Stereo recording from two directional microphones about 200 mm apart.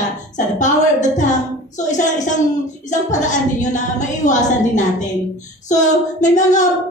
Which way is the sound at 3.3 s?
40° left (ahead or behind).